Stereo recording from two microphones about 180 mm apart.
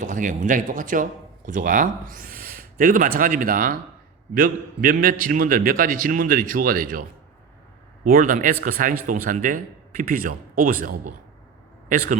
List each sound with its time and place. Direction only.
0.0 s speech: 45° right (ahead or behind)
8.0 s speech: 50° right (ahead or behind)